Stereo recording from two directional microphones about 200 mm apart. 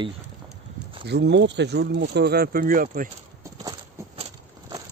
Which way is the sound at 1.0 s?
60° right (ahead or behind).